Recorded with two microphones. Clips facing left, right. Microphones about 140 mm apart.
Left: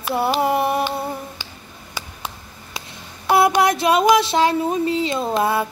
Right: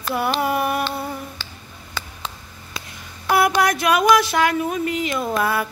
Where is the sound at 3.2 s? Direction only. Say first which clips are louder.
Left 2 dB; 25° left (ahead or behind).